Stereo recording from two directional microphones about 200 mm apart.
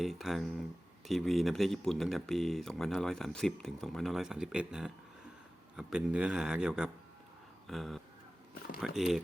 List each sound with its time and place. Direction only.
0.0 s speech: centre (ahead or behind)